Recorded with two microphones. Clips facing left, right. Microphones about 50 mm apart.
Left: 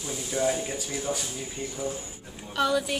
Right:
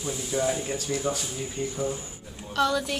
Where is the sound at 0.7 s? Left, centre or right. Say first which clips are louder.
Right 3 dB; centre.